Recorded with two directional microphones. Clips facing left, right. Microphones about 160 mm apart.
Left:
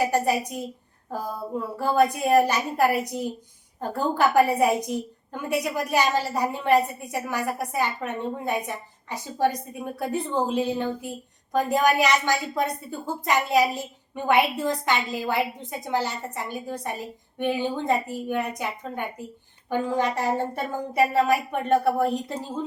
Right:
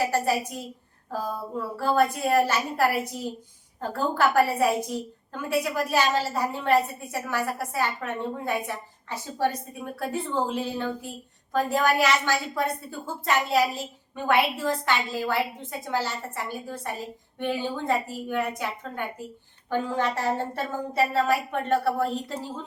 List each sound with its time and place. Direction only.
0.0 s a woman's voice: 15° left (ahead or behind)